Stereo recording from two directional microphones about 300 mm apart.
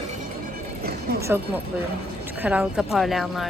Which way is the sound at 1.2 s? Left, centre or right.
Centre.